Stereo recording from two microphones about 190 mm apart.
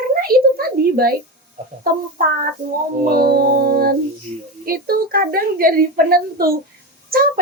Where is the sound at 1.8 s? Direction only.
50° right (ahead or behind).